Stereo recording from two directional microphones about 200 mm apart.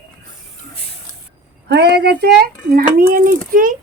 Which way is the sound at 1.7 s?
60° right (ahead or behind).